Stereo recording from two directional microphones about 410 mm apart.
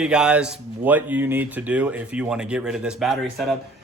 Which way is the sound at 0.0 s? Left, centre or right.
Centre.